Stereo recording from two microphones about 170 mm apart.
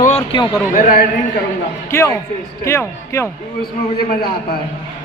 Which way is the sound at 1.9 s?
15° left (ahead or behind).